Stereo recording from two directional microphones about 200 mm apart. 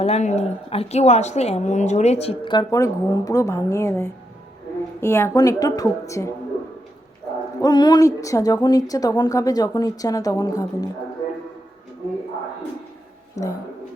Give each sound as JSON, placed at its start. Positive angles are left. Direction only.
{"t": 0.0, "sound": "a woman's voice", "side_deg": 35}
{"t": 7.6, "sound": "a woman's voice", "side_deg": 20}
{"t": 13.3, "sound": "speech", "side_deg": 15}